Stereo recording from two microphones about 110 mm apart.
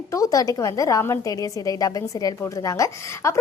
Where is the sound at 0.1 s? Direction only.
30° left (ahead or behind).